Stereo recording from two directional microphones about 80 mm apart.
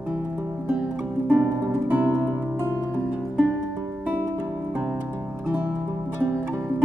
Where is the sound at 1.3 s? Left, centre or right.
Centre.